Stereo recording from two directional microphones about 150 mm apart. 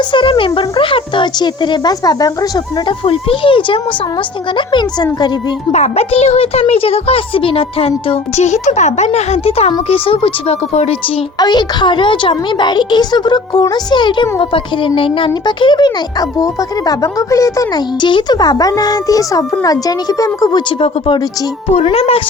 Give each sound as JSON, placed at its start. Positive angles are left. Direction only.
{"t": 0.1, "sound": "speech", "side_deg": 35}
{"t": 3.1, "sound": "speech", "side_deg": 35}
{"t": 5.7, "sound": "speech", "side_deg": 45}
{"t": 8.4, "sound": "speech", "side_deg": 50}
{"t": 11.3, "sound": "speech", "side_deg": 30}
{"t": 21.8, "sound": "speech", "side_deg": 40}